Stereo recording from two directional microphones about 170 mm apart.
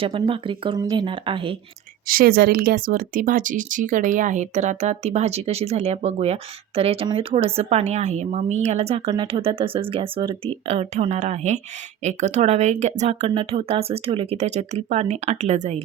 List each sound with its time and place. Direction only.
0.0 s speech: 30° right (ahead or behind)
2.0 s speech: 60° right (ahead or behind); by 15.8 s 40° right (ahead or behind)